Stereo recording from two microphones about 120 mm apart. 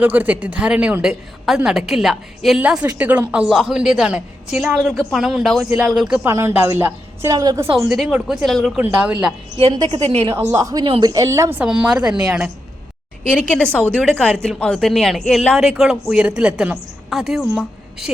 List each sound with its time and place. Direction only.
0.0 s a woman's voice: 15° right (ahead or behind)
6.2 s a woman's voice: 20° right (ahead or behind)
7.3 s a woman's voice: 30° right (ahead or behind)
7.9 s speech: 5° right (ahead or behind)
8.8 s a woman's voice: 10° right (ahead or behind)
9.9 s a woman's voice: 60° right (ahead or behind)
10.3 s a woman's voice: 25° right (ahead or behind)
10.8 s speech: 45° right (ahead or behind)
11.1 s a woman's voice: 25° right (ahead or behind)
11.6 s a woman's voice: 10° right (ahead or behind)
13.3 s speech: 10° left (ahead or behind); by 18.1 s 10° right (ahead or behind)